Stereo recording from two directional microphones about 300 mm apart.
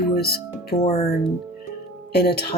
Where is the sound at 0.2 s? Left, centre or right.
Left.